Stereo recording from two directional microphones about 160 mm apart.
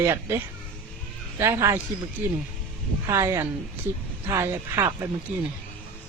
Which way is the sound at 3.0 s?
20° right (ahead or behind).